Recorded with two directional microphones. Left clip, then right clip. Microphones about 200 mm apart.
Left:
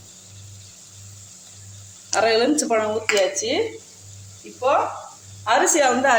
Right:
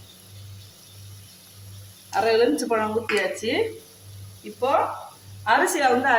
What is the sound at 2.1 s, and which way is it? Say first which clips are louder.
Speech: left 2 dB; 35° left (ahead or behind).